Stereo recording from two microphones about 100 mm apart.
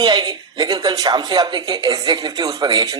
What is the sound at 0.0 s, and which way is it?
Speech, 45° right (ahead or behind).